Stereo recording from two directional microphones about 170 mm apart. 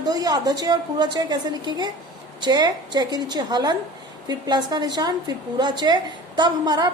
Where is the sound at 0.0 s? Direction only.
20° right (ahead or behind).